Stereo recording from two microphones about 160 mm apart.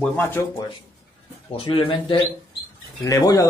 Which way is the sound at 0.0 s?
10° left (ahead or behind).